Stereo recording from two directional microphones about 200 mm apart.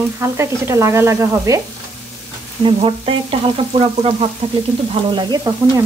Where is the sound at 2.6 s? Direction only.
25° right (ahead or behind).